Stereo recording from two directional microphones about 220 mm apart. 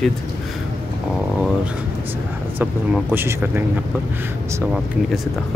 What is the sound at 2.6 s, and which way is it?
Speech, 10° right (ahead or behind).